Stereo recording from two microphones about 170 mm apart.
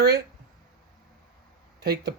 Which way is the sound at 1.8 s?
75° right (ahead or behind).